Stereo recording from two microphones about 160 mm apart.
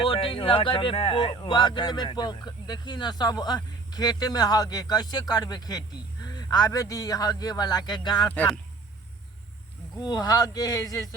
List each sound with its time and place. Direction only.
0.0 s speech: 35° left (ahead or behind)
10.0 s speech: 25° left (ahead or behind)